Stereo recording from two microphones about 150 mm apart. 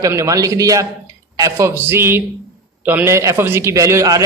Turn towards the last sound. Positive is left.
turn(degrees=-20)  # may be behind; listen again after turning